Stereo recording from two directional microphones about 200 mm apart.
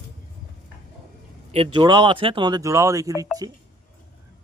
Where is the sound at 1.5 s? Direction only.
25° right (ahead or behind).